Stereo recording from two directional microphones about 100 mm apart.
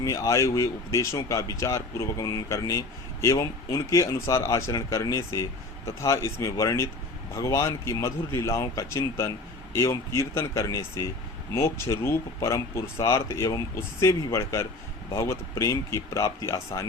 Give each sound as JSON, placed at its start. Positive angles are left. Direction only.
{"t": 0.0, "sound": "a man's voice", "side_deg": 30}